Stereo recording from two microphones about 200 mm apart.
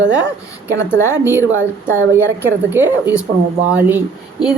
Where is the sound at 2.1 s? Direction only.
10° right (ahead or behind).